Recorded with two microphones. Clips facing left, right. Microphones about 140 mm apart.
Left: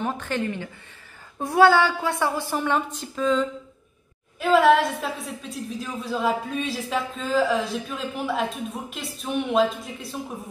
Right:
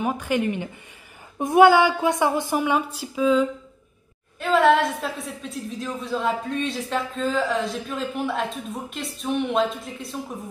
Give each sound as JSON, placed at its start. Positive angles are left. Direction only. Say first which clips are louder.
{"t": 0.0, "sound": "a woman's voice", "louder": "right 3 dB", "side_deg": -10}